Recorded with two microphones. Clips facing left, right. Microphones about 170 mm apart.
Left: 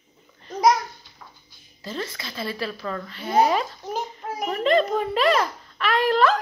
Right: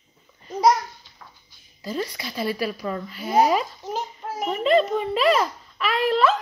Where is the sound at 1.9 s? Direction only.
15° right (ahead or behind).